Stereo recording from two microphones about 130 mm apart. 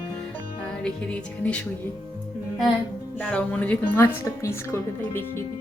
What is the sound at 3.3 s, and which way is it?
A woman's voice, 10° left (ahead or behind).